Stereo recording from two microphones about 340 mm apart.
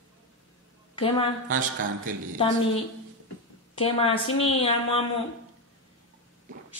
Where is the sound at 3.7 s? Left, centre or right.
Centre.